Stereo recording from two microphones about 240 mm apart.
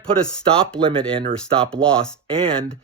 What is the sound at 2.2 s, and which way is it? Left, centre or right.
Speech, right.